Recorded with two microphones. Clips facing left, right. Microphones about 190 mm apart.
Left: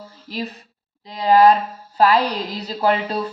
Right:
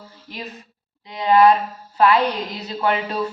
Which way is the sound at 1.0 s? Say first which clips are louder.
Left 1 dB; 35° left (ahead or behind).